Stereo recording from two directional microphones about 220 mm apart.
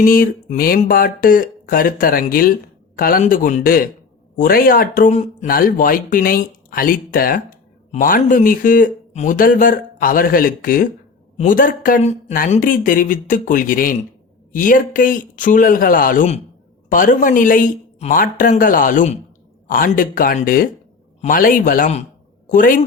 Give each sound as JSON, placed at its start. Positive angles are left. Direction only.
{"t": 0.0, "sound": "a woman's voice", "side_deg": 40}